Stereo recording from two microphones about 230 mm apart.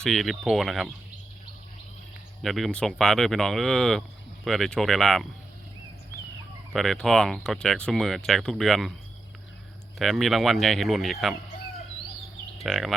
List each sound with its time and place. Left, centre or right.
0.0 s speech: centre
2.4 s speech: centre
6.7 s speech: centre
10.0 s speech: centre
12.6 s speech: centre